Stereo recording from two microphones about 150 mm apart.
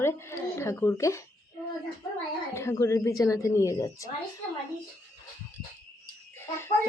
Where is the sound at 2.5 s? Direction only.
20° left (ahead or behind).